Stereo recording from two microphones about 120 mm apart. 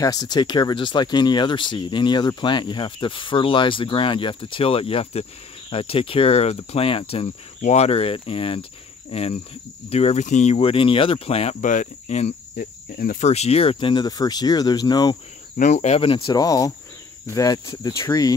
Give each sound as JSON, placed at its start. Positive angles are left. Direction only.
{"t": 0.0, "sound": "speech", "side_deg": 30}
{"t": 11.6, "sound": "speech", "side_deg": 90}
{"t": 15.5, "sound": "speech", "side_deg": 80}
{"t": 16.0, "sound": "speech", "side_deg": 45}
{"t": 16.3, "sound": "speech", "side_deg": 30}